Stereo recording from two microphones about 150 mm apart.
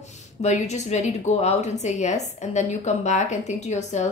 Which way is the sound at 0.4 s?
50° left (ahead or behind).